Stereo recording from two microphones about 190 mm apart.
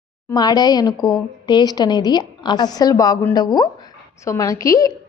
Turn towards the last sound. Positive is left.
turn(degrees=20)  # may be behind; listen again after turning